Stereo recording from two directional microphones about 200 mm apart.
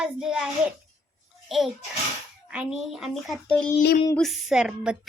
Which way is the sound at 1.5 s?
Centre (ahead or behind).